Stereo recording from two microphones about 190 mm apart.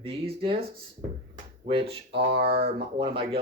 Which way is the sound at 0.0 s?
30° right (ahead or behind).